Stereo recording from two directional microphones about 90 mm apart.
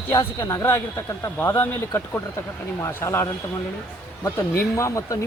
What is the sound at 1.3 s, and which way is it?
Speech, 20° left (ahead or behind).